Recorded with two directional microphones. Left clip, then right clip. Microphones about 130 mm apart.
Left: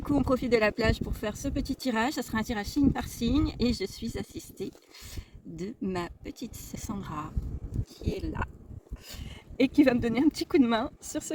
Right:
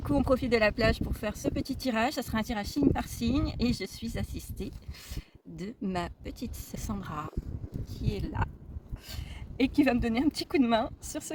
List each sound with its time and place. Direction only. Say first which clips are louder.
0.0 s speech: even; 40° right (ahead or behind)